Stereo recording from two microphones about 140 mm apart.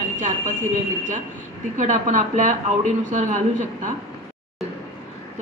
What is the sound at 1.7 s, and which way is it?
A woman's voice, 65° right (ahead or behind).